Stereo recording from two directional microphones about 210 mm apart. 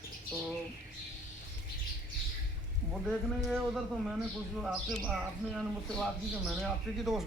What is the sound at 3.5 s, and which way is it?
Speech, centre (ahead or behind).